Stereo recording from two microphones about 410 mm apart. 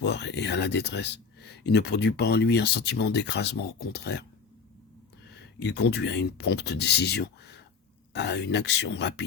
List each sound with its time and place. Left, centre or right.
0.0 s speech: left
5.4 s speech: left